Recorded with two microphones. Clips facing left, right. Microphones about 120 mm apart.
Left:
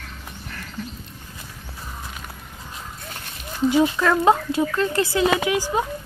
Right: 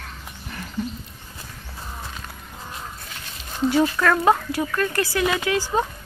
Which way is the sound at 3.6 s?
15° left (ahead or behind).